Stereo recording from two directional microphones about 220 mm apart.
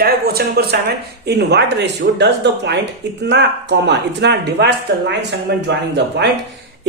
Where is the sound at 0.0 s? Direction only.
45° right (ahead or behind).